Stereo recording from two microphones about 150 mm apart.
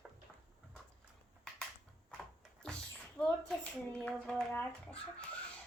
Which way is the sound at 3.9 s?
5° left (ahead or behind).